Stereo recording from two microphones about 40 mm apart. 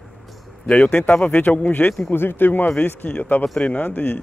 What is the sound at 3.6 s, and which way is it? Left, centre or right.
Speech, left.